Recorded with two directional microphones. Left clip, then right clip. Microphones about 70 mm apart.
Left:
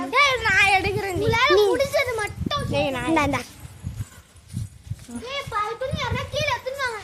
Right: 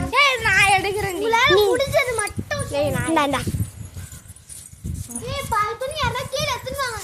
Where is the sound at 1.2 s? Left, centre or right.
Right.